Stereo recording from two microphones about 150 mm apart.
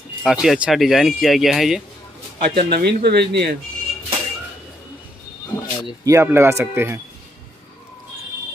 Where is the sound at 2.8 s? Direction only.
90° right.